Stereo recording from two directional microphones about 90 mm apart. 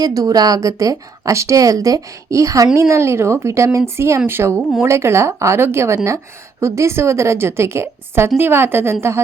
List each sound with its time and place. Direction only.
0.0 s a woman's voice: 40° right (ahead or behind)